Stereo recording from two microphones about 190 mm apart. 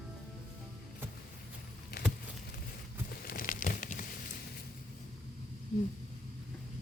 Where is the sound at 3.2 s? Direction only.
45° left (ahead or behind).